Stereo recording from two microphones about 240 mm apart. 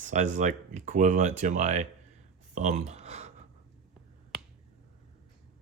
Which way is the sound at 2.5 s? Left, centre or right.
Right.